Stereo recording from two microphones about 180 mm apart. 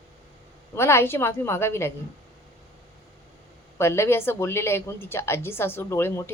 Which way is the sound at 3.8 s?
15° left (ahead or behind).